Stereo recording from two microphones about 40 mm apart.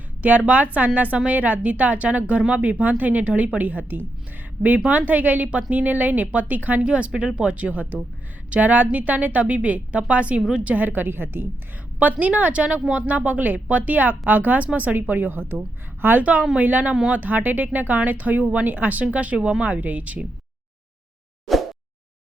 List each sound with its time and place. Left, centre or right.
0.2 s speech: right
6.8 s speech: right
12.2 s speech: right
14.9 s a woman's voice: right
16.2 s speech: right